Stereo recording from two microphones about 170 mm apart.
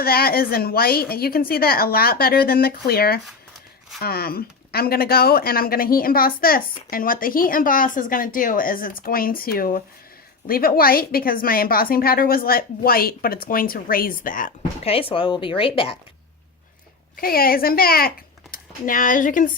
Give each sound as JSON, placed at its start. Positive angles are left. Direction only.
{"t": 0.0, "sound": "speech", "side_deg": 65}
{"t": 14.8, "sound": "speech", "side_deg": 35}
{"t": 17.2, "sound": "speech", "side_deg": 60}